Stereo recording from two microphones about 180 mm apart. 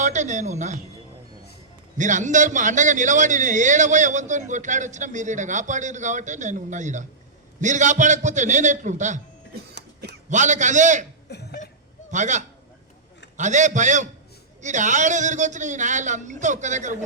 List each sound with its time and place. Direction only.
0.0 s a man's voice: 40° right (ahead or behind)
2.0 s a man's voice: 45° right (ahead or behind)
10.2 s a man's voice: 40° right (ahead or behind)
11.3 s cough: 65° left (ahead or behind)
12.1 s a man's voice: 40° right (ahead or behind)